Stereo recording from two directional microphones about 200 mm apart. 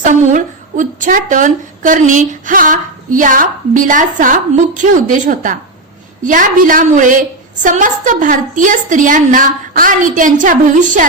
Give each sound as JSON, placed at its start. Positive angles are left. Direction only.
{"t": 0.0, "sound": "a woman's voice", "side_deg": -40}